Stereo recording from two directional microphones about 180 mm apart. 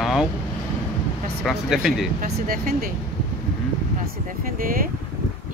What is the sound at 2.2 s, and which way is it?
Speech, 55° right (ahead or behind).